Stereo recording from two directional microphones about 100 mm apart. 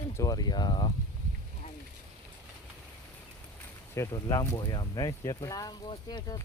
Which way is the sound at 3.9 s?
30° left (ahead or behind).